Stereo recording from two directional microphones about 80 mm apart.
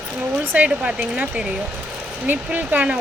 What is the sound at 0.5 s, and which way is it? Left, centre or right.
Speech, centre.